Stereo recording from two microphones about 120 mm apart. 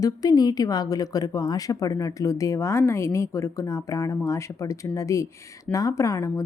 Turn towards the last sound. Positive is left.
turn(degrees=25)  # may be behind; listen again after turning